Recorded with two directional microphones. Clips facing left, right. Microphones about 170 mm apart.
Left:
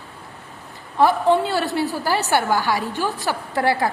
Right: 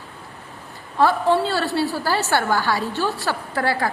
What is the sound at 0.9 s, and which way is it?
A woman's voice, 15° left (ahead or behind).